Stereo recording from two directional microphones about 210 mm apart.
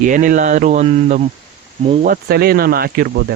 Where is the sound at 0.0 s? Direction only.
40° right (ahead or behind).